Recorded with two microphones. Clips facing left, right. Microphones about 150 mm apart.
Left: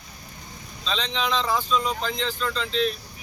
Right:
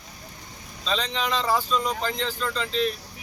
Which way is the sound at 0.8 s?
10° right (ahead or behind).